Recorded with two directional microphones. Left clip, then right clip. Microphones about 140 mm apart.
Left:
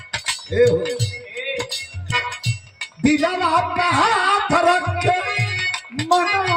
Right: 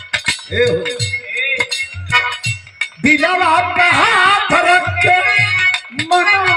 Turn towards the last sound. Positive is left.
turn(degrees=50)  # may be behind; listen again after turning